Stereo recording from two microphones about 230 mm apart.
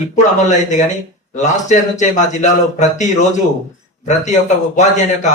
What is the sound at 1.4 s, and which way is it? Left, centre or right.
Speech, left.